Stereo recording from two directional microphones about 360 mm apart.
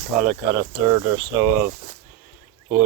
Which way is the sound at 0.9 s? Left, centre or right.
Centre.